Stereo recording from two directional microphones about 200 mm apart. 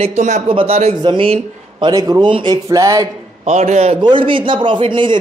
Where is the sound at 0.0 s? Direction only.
35° right (ahead or behind); by 3.1 s 15° right (ahead or behind).